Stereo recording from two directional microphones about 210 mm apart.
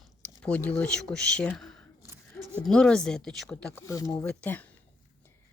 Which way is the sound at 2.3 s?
Centre (ahead or behind).